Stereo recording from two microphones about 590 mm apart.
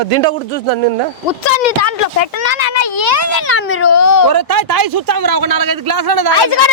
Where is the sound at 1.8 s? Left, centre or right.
Left.